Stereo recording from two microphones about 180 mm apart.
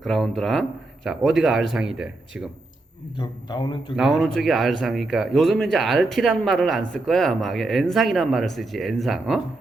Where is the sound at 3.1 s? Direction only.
25° left (ahead or behind).